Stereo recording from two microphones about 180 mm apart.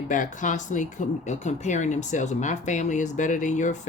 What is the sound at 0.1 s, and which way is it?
Speech, 45° left (ahead or behind).